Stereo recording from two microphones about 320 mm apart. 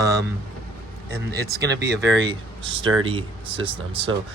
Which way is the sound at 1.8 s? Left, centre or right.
Right.